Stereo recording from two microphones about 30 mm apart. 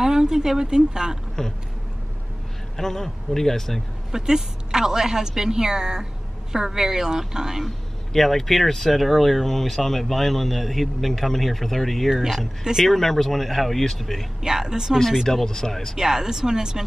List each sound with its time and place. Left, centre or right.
0.0 s speech: centre
1.4 s a sound: left
2.8 s a man's voice: centre
4.1 s a woman's voice: centre
7.6 s speech: centre
14.4 s a woman's voice: centre
15.4 s a man's voice: centre
16.0 s a woman's voice: centre